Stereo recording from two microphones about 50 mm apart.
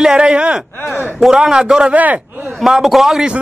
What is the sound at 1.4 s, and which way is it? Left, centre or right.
Speech, centre.